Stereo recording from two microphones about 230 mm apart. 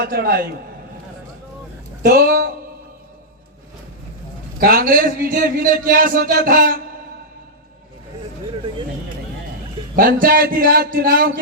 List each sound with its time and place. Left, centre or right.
0.0 s speech: right
2.0 s speech: right
4.6 s speech: right
10.2 s speech: right